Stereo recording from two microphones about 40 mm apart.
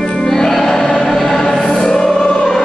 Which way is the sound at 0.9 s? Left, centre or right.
Centre.